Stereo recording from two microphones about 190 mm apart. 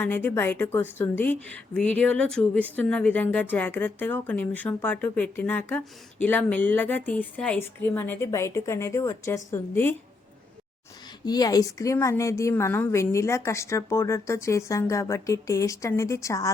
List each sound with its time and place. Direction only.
0.0 s a woman's voice: 10° left (ahead or behind)
11.3 s a woman's voice: 20° left (ahead or behind)